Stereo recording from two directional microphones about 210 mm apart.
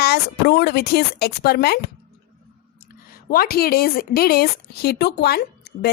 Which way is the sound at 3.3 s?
45° left (ahead or behind).